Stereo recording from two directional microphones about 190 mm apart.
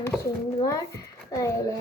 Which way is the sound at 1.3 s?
15° left (ahead or behind).